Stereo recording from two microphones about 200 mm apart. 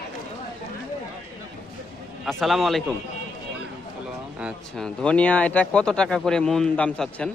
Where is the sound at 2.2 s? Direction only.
Centre (ahead or behind).